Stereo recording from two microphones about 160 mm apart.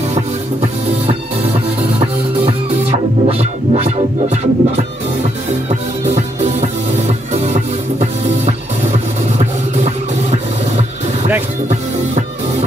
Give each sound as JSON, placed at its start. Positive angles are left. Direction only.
{"t": 3.3, "sound": "music", "side_deg": -40}